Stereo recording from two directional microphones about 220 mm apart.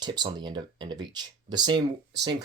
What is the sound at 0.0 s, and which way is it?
Speech, 20° right (ahead or behind).